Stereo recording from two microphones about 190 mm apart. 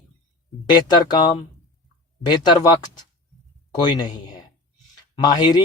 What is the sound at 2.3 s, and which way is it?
Speech, 20° left (ahead or behind).